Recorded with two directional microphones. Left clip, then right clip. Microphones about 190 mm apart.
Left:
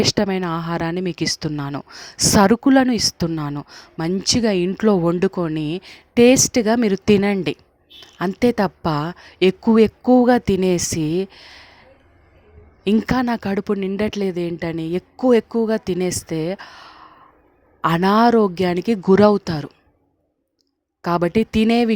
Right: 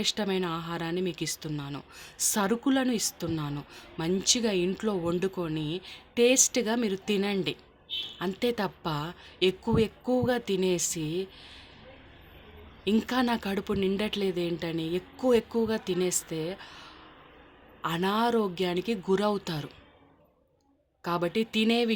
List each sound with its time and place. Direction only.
0.0 s speech: 50° left (ahead or behind)
12.8 s speech: 50° left (ahead or behind)
21.0 s speech: 50° left (ahead or behind)